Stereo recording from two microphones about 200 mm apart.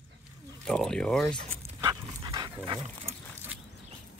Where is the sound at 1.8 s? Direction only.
20° right (ahead or behind).